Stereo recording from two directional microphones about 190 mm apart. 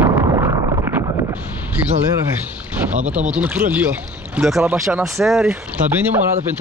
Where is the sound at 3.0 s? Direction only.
35° right (ahead or behind).